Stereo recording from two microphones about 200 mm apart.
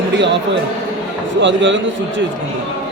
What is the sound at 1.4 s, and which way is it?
Speech, 65° right (ahead or behind).